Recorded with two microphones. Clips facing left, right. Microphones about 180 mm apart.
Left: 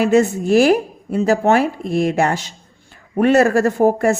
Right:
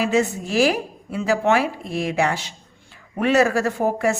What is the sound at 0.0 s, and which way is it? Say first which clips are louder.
A woman's voice: left 6 dB; 50° left (ahead or behind).